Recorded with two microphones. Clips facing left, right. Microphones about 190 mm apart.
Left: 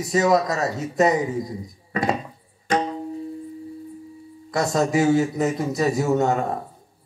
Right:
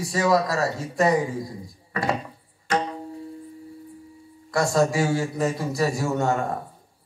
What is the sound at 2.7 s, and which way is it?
Tabla, 20° left (ahead or behind).